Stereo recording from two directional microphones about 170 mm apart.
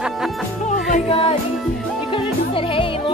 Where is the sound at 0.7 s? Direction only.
50° left (ahead or behind).